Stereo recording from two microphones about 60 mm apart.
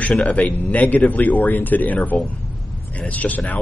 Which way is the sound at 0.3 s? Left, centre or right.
Left.